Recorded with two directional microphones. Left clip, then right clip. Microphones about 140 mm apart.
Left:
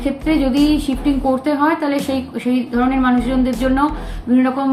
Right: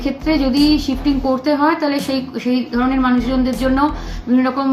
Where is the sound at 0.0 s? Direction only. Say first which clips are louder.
Even; 5° left (ahead or behind).